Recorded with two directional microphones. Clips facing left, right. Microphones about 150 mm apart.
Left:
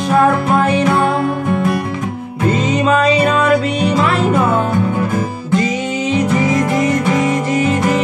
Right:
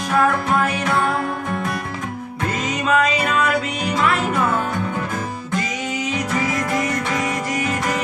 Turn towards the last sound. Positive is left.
turn(degrees=25)  # may be behind; listen again after turning